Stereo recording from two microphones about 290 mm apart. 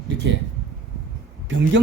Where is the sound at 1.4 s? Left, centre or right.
Right.